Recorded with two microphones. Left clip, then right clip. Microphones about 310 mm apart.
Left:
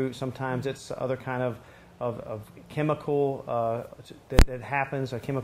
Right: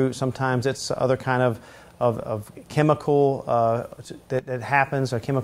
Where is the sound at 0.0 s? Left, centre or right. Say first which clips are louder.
Right 7 dB; right.